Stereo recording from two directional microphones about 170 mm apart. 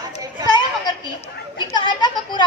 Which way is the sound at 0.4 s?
25° left (ahead or behind).